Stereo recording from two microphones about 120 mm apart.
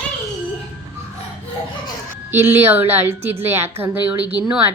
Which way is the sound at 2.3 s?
20° right (ahead or behind).